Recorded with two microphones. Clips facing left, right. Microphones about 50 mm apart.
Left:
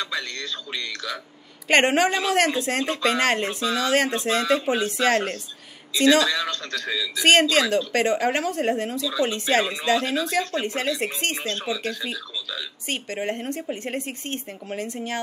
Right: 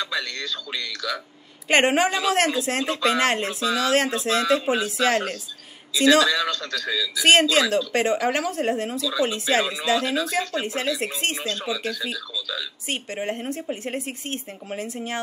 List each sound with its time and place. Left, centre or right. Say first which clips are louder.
0.7 s a man's voice: right 1 dB; left
1.7 s speech: even; centre
6.5 s a man's voice: right 1 dB; left
7.2 s speech: even; centre
12.8 s speech: left 1 dB; centre